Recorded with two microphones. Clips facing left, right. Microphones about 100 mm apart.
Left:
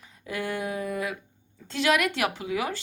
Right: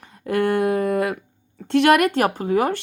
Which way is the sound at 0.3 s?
55° right (ahead or behind).